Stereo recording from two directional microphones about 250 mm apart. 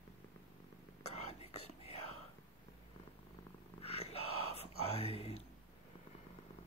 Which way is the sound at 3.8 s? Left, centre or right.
Left.